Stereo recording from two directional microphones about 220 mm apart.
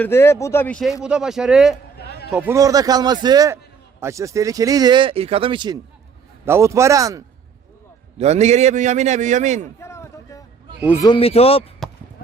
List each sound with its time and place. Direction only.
0.0 s speech: 10° left (ahead or behind); by 7.2 s 15° right (ahead or behind)
8.2 s a man's voice: 30° right (ahead or behind)
9.8 s a sound: 10° left (ahead or behind)
11.0 s speech: 25° left (ahead or behind)
11.8 s chop: centre (ahead or behind)